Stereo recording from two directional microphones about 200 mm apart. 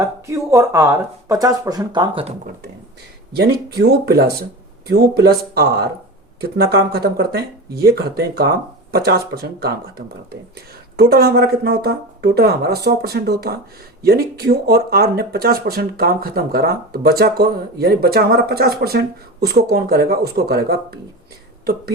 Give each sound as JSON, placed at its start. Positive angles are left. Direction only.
{"t": 0.0, "sound": "speech", "side_deg": -15}
{"t": 3.3, "sound": "speech", "side_deg": -55}
{"t": 10.9, "sound": "speech", "side_deg": -50}